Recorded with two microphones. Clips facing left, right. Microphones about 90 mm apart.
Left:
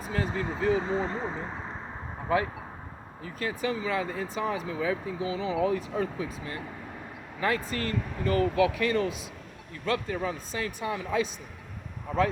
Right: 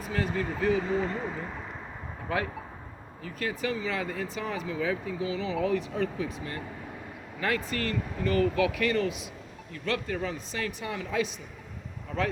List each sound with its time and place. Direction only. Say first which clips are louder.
0.0 s speech: even; 25° left (ahead or behind)
3.3 s speech: left 1 dB; 25° left (ahead or behind)
7.5 s speech: even; 25° left (ahead or behind)